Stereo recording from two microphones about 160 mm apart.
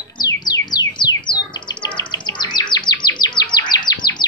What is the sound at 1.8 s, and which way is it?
Chirp, 30° left (ahead or behind).